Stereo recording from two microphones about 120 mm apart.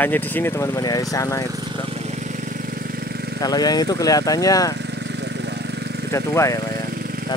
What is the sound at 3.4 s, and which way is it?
Speech, 35° left (ahead or behind).